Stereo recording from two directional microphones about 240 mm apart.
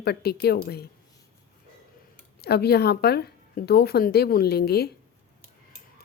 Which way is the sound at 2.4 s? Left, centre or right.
Left.